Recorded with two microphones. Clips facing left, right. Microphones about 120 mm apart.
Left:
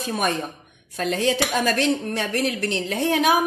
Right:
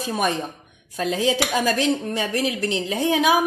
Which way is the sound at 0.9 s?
15° right (ahead or behind).